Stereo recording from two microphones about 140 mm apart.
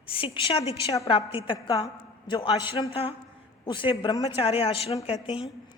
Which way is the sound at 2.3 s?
30° left (ahead or behind).